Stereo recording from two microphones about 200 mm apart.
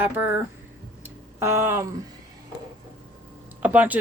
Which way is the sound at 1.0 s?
15° right (ahead or behind).